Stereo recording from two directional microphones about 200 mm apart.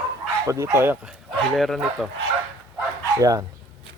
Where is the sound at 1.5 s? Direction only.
Centre (ahead or behind).